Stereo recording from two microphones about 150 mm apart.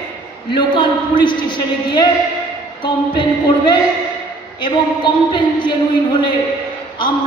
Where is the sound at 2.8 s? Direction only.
30° left (ahead or behind).